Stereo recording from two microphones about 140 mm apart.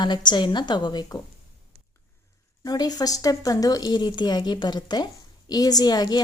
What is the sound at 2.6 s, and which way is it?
A woman's voice, 30° left (ahead or behind).